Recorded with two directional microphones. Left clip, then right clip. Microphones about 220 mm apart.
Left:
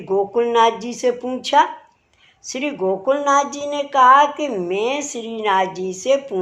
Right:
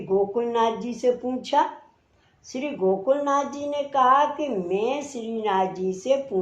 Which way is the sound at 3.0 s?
25° left (ahead or behind).